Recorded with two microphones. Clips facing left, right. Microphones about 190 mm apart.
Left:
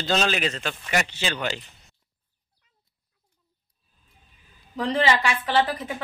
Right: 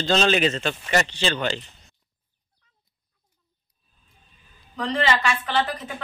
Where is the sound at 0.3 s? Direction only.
30° right (ahead or behind).